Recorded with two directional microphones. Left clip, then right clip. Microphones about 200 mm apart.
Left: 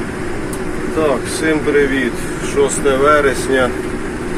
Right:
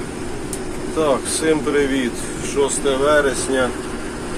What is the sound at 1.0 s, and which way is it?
Vehicle, 15° right (ahead or behind).